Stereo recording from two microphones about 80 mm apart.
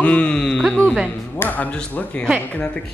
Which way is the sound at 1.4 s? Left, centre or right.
Left.